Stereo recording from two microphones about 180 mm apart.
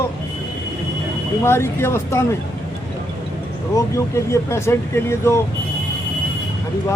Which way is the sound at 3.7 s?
15° left (ahead or behind).